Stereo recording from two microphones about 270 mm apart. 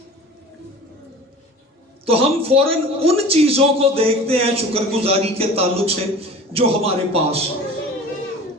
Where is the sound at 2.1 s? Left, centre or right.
Right.